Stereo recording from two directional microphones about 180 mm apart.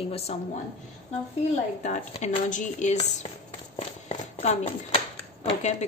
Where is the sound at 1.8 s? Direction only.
40° left (ahead or behind).